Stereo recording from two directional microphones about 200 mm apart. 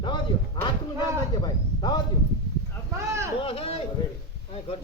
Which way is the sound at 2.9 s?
15° right (ahead or behind).